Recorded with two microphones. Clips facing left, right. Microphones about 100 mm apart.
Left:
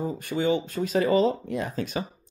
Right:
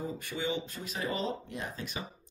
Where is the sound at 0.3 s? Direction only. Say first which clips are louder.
Left 11 dB; 60° left (ahead or behind); by 2.0 s 90° left.